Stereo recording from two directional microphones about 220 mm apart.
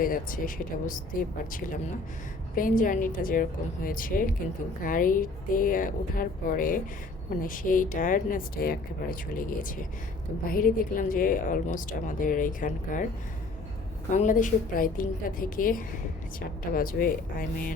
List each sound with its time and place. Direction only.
0.0 s speech: 40° left (ahead or behind)
2.6 s speech: 40° left (ahead or behind)
14.1 s speech: 35° left (ahead or behind)